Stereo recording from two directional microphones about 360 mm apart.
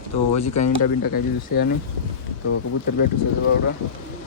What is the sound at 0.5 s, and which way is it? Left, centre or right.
Speech, left.